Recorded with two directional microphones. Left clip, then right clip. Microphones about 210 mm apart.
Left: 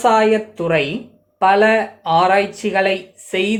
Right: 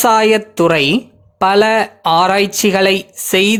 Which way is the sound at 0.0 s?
50° right (ahead or behind).